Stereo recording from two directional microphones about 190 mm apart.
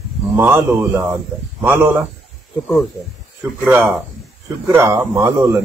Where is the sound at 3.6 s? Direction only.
10° right (ahead or behind).